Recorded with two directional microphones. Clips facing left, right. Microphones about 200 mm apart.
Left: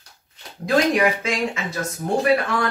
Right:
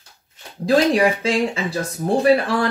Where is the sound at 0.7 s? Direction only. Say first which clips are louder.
Right 3 dB; 30° right (ahead or behind).